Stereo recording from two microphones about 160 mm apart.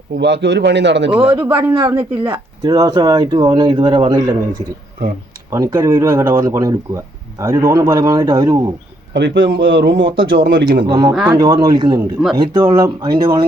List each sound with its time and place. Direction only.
0.2 s a man's voice: 90° right
1.2 s speech: 30° right (ahead or behind)
1.9 s speech: 15° right (ahead or behind)
5.5 s speech: 20° right (ahead or behind)
9.1 s a man's voice: 90° right
10.3 s speech: 75° right (ahead or behind)
10.8 s speech: 25° right (ahead or behind)